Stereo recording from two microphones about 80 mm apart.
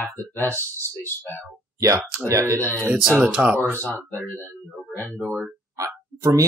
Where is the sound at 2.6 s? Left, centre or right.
Left.